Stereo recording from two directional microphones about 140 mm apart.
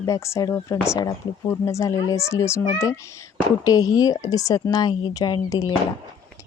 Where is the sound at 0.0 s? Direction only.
20° left (ahead or behind).